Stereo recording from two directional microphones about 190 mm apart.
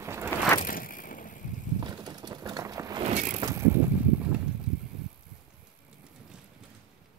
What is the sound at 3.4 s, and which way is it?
Bicycle, 15° right (ahead or behind).